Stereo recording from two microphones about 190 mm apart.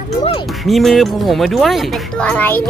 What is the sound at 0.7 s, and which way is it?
Speech, centre (ahead or behind).